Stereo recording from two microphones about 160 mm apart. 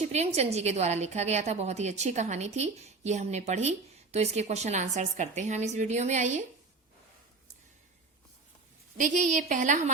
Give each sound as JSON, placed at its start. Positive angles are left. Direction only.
{"t": 0.0, "sound": "a woman's voice", "side_deg": -40}
{"t": 9.0, "sound": "a woman's voice", "side_deg": -50}